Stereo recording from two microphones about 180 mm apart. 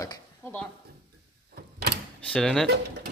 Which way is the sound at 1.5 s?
60° right (ahead or behind).